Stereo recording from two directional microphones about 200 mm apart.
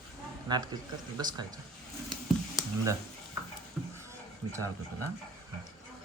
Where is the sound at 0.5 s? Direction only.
20° right (ahead or behind).